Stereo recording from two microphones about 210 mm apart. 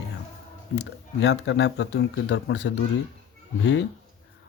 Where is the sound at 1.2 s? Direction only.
60° left (ahead or behind).